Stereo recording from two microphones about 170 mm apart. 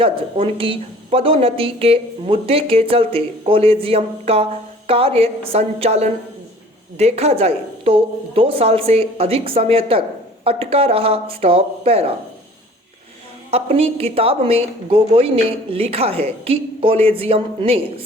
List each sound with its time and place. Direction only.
0.0 s a woman's voice: 30° right (ahead or behind)
13.5 s a woman's voice: 35° right (ahead or behind)